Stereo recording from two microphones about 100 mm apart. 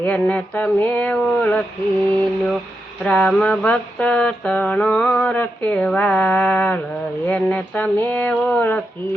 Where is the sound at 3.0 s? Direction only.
10° left (ahead or behind).